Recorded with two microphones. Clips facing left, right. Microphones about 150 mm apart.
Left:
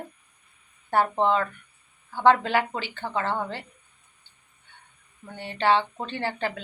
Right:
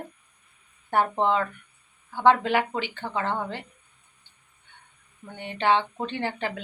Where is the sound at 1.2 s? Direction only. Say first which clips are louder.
Left 1 dB; 15° right (ahead or behind).